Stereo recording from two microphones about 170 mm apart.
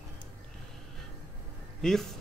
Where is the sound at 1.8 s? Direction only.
Centre (ahead or behind).